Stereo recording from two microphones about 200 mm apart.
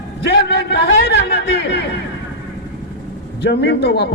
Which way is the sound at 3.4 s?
55° left (ahead or behind).